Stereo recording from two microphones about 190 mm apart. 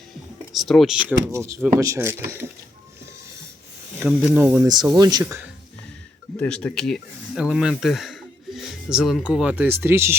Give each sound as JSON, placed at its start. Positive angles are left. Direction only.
{"t": 0.5, "sound": "speech", "side_deg": 0}
{"t": 4.0, "sound": "speech", "side_deg": -10}
{"t": 4.6, "sound": "speech", "side_deg": -20}
{"t": 6.4, "sound": "speech", "side_deg": 10}